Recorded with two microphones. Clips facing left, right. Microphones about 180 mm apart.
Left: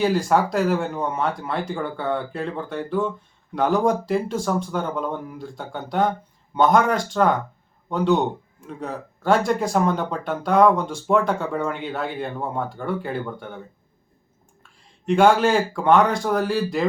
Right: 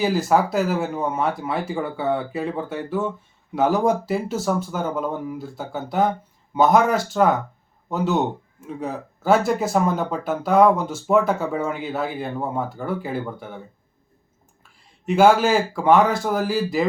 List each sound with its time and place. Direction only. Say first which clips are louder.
0.0 s a man's voice: even; 5° right (ahead or behind)
14.6 s speech: right 1 dB; 5° right (ahead or behind)